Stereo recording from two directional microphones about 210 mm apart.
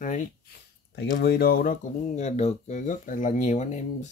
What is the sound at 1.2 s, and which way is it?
Speech, 50° left (ahead or behind).